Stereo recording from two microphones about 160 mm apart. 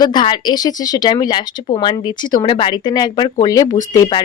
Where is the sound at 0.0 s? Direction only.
30° left (ahead or behind).